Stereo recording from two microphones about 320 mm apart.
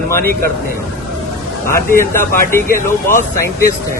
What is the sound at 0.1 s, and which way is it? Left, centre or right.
Speech, right.